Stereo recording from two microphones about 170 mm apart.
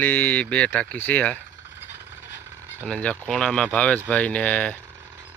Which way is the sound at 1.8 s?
90° left.